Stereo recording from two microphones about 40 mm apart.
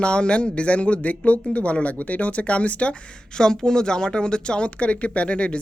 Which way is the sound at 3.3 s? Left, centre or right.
Centre.